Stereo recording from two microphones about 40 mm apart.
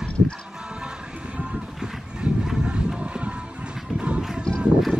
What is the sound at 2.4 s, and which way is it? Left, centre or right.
Vehicle, centre.